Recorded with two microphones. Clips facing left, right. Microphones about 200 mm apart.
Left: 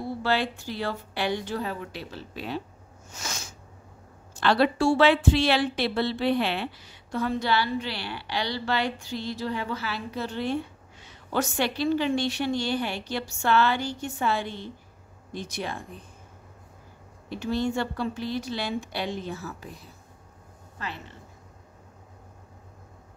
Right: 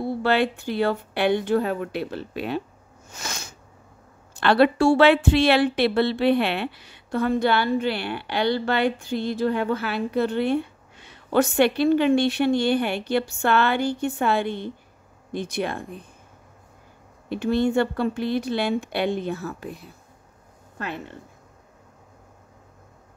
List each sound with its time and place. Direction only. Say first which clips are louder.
0.2 s a woman's voice: right 5 dB; 60° right (ahead or behind)
3.1 s a sound: right 2 dB; 60° right (ahead or behind)
4.3 s a woman's voice: right 4 dB; 60° right (ahead or behind)
17.3 s a woman's voice: right 6 dB; 60° right (ahead or behind)